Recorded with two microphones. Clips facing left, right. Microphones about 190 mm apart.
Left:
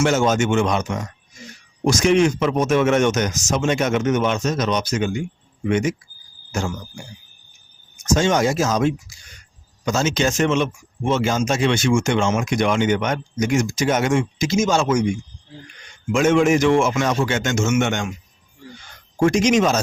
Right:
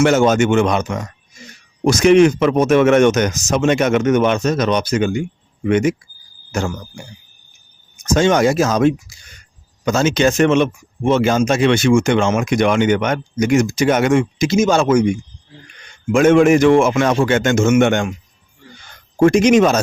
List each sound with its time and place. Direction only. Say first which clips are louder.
0.0 s speech: right 5 dB; 60° right (ahead or behind)
8.0 s speech: right 4 dB; 60° right (ahead or behind)
16.1 s speech: right 5 dB; 55° right (ahead or behind)
19.2 s speech: right 5 dB; 55° right (ahead or behind)